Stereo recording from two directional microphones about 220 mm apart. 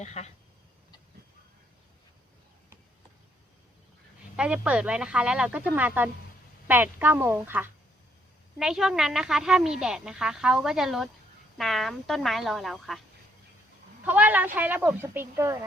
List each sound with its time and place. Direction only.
0.0 s speech: 30° left (ahead or behind)
4.4 s a woman's voice: 5° right (ahead or behind)
14.0 s speech: 5° right (ahead or behind)